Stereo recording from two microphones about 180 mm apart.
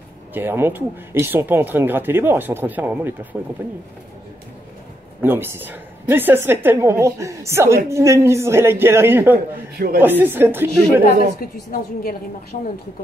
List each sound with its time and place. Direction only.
0.3 s a woman's voice: 10° right (ahead or behind)
5.2 s a woman's voice: 10° right (ahead or behind)
11.7 s a woman's voice: 55° left (ahead or behind)
12.5 s a woman's voice: 40° left (ahead or behind)